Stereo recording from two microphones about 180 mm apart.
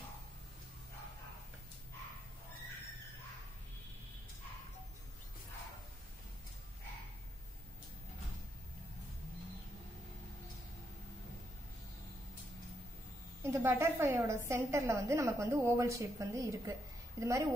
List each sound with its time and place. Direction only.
13.4 s a woman's voice: 15° right (ahead or behind)